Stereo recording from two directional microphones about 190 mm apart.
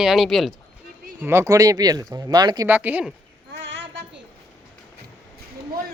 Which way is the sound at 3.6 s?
70° right (ahead or behind).